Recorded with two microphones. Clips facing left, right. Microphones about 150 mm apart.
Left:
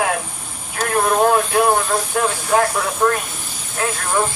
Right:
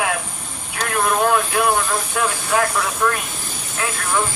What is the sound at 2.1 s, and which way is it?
Music, 40° left (ahead or behind).